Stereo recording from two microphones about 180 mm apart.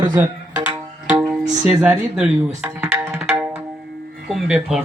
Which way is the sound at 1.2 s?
5° right (ahead or behind).